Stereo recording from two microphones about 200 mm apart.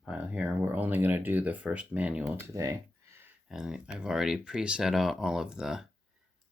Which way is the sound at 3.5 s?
5° right (ahead or behind).